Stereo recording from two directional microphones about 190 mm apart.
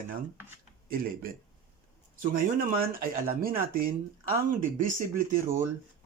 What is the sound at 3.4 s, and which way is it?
Speech, 50° right (ahead or behind).